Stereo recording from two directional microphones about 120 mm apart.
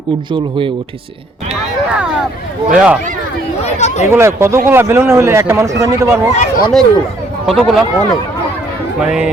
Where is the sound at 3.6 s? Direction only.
70° left (ahead or behind).